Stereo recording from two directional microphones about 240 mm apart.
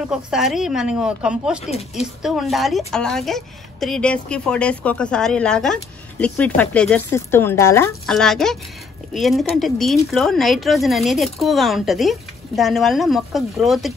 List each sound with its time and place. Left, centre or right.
0.1 s speech: centre
1.7 s speech: left
2.2 s speech: centre